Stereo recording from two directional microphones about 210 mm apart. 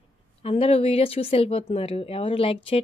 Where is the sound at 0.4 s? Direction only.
25° left (ahead or behind).